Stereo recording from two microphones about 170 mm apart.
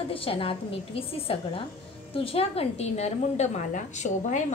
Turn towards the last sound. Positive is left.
turn(degrees=45)  # may be behind; listen again after turning